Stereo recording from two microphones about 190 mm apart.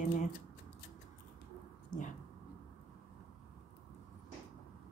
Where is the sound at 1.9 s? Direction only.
45° left (ahead or behind).